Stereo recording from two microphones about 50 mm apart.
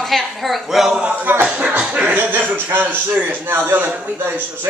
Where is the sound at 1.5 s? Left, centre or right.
Right.